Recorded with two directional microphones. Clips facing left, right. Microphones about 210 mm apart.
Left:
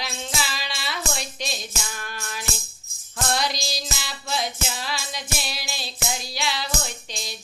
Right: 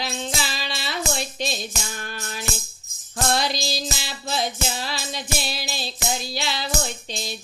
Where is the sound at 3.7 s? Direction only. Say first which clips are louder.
Right 3 dB; 30° right (ahead or behind).